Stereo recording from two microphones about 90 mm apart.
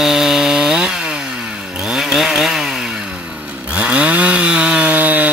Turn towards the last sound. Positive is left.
turn(degrees=-20)  # may be behind; listen again after turning